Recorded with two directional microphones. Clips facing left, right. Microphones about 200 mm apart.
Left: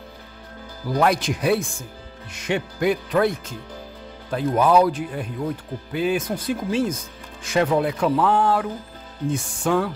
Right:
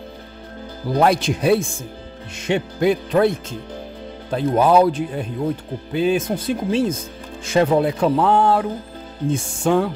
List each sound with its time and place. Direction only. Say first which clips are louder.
0.8 s speech: right 3 dB; 25° right (ahead or behind)